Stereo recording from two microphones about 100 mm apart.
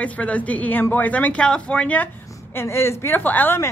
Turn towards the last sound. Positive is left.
turn(degrees=20)  # may be behind; listen again after turning